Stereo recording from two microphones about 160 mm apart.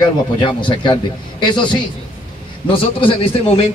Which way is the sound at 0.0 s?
30° left (ahead or behind).